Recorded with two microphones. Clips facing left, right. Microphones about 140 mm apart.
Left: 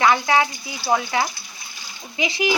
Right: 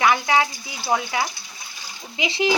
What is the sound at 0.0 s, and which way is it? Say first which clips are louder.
Speech: left 1 dB; 15° right (ahead or behind).